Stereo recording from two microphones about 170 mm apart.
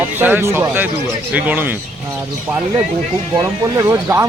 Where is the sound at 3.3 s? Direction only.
25° right (ahead or behind).